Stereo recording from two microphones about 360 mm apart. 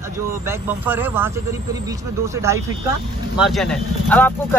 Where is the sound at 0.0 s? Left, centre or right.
Centre.